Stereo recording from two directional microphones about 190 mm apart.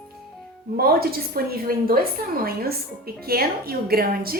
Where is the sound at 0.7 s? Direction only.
55° right (ahead or behind).